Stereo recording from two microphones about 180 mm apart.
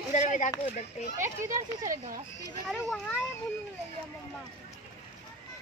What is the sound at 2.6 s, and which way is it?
Speech, centre (ahead or behind).